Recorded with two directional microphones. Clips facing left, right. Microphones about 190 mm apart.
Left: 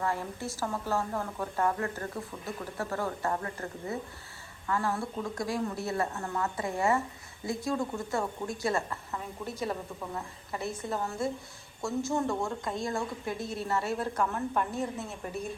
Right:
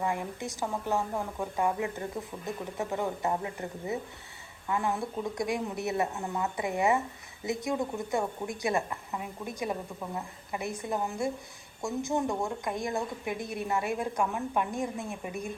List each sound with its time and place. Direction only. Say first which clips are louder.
0.0 s speech: right 1 dB; 15° right (ahead or behind)